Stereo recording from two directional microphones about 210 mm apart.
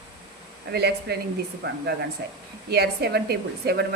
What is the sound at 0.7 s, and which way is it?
Speech, 50° right (ahead or behind).